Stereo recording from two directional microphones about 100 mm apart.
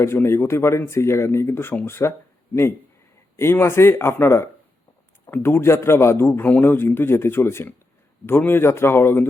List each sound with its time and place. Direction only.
0.0 s speech: 25° left (ahead or behind)
3.3 s speech: 25° left (ahead or behind)